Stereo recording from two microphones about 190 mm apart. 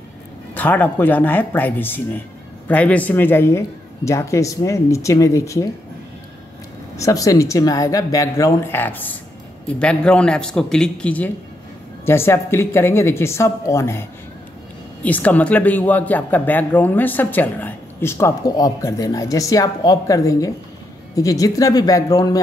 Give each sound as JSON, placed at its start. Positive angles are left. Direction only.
{"t": 0.6, "sound": "speech", "side_deg": 10}
{"t": 7.0, "sound": "a man's voice", "side_deg": 15}
{"t": 15.0, "sound": "speech", "side_deg": 10}